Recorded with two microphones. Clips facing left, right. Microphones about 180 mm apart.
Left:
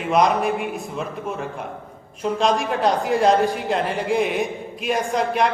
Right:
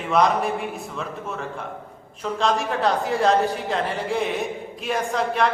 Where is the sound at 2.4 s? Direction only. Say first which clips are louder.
Left 2 dB; 15° left (ahead or behind).